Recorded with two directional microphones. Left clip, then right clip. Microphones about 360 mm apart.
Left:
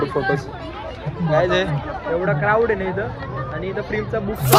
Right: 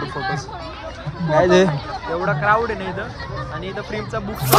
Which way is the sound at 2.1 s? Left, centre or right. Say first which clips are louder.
Right 1 dB; centre.